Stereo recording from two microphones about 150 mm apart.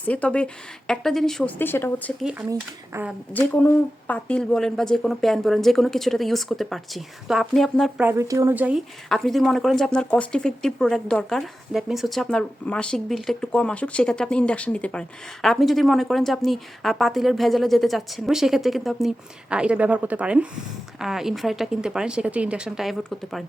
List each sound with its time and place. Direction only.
0.0 s a woman's voice: 10° left (ahead or behind)
1.5 s a woman's voice: 15° left (ahead or behind)
2.5 s a woman's voice: 15° right (ahead or behind)
3.3 s speech: 10° left (ahead or behind)
8.0 s a woman's voice: 20° right (ahead or behind)
9.0 s speech: centre (ahead or behind)